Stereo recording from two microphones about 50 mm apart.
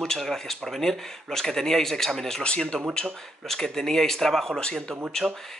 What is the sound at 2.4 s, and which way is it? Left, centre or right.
Speech, centre.